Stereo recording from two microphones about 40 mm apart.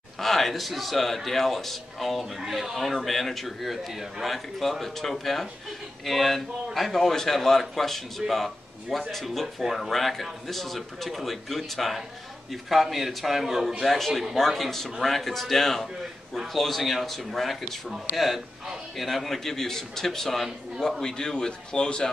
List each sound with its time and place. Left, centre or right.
0.2 s a man's voice: centre
13.8 s a man's voice: centre
21.0 s a man's voice: centre